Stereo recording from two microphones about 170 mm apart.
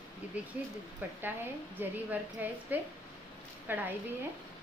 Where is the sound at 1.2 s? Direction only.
10° right (ahead or behind).